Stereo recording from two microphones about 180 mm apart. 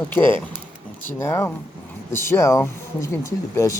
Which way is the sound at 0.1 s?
10° left (ahead or behind).